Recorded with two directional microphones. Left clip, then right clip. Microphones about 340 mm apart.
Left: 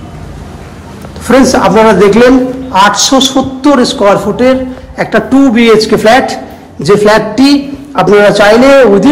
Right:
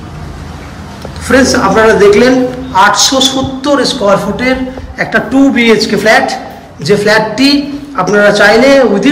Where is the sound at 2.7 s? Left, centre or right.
Centre.